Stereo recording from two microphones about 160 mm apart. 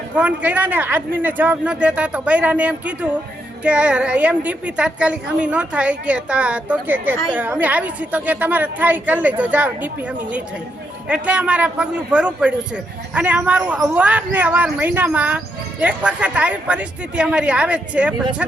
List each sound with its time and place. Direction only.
0.2 s a woman's voice: 10° right (ahead or behind)
11.1 s a woman's voice: 5° right (ahead or behind)